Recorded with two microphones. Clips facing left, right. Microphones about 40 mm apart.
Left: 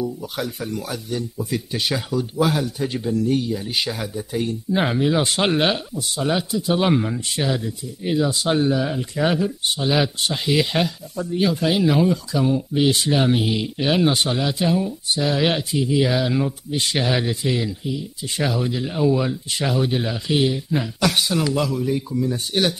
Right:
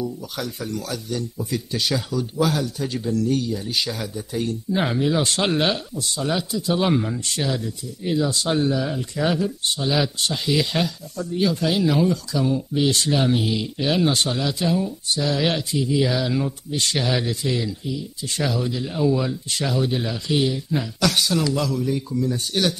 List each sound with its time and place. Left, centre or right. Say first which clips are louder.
0.0 s speech: left 2 dB; centre